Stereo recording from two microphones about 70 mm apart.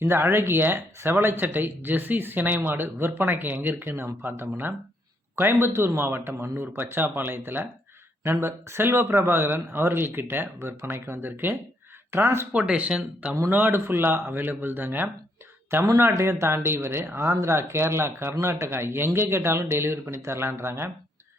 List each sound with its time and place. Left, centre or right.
0.0 s speech: right
12.5 s speech: centre
13.5 s speech: right